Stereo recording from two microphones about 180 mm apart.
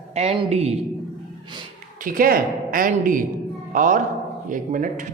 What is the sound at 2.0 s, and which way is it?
A woman's voice, 50° right (ahead or behind).